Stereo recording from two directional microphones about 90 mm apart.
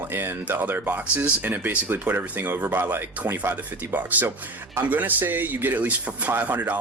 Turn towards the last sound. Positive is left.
turn(degrees=-20)  # may be behind; listen again after turning